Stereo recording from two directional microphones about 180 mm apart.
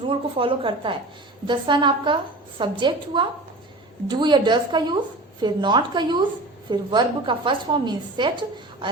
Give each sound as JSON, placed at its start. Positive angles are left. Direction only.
{"t": 0.1, "sound": "a woman's voice", "side_deg": -30}